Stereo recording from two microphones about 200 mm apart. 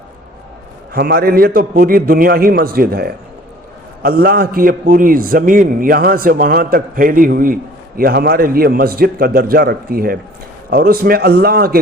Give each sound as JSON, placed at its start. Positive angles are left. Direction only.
{"t": 0.9, "sound": "a man's voice", "side_deg": -50}